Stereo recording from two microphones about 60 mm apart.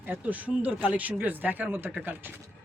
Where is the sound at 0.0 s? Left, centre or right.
Right.